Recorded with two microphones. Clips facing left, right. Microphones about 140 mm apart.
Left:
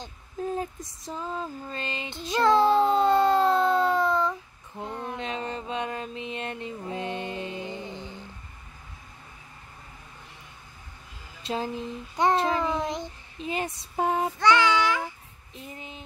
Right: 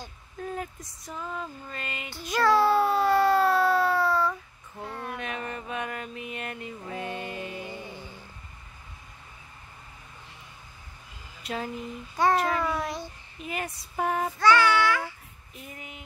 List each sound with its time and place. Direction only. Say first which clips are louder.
0.0 s a sound: left 5 dB; 25° left (ahead or behind)
1.0 s child singing: left 3 dB; 30° left (ahead or behind)
6.8 s music: left 2 dB; 25° left (ahead or behind)
11.4 s babbling: left 3 dB; 25° left (ahead or behind)
13.9 s child singing: left 2 dB; 20° left (ahead or behind)